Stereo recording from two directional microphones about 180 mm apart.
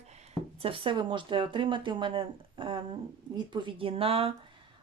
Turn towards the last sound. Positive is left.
turn(degrees=-30)  # may be behind; listen again after turning